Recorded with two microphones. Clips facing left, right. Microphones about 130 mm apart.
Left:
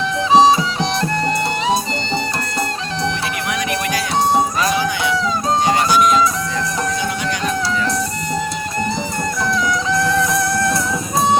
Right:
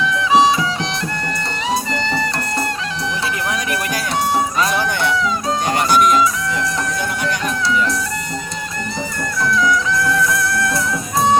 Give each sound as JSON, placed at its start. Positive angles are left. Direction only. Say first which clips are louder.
{"t": 0.2, "sound": "music", "louder": "left 3 dB", "side_deg": 35}
{"t": 3.5, "sound": "music", "louder": "left 1 dB", "side_deg": -40}
{"t": 4.7, "sound": "music", "louder": "even", "side_deg": -55}
{"t": 9.5, "sound": "music", "louder": "right 3 dB", "side_deg": 25}